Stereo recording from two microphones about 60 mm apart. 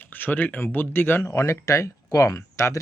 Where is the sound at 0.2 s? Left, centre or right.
Left.